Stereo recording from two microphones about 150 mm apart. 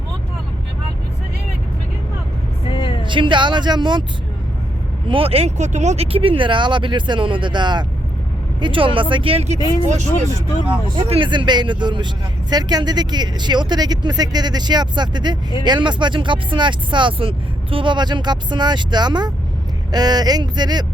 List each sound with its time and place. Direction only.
2.6 s vehicle: 35° left (ahead or behind)
3.0 s speech: 35° right (ahead or behind)
5.0 s speech: 40° right (ahead or behind)
10.9 s speech: 30° right (ahead or behind)